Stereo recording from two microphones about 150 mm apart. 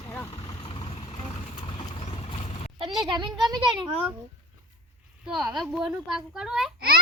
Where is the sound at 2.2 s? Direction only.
40° left (ahead or behind).